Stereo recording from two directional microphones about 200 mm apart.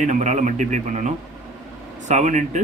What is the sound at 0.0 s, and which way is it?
Speech, 40° right (ahead or behind).